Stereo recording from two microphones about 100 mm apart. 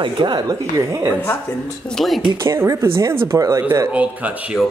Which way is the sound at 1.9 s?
Centre (ahead or behind).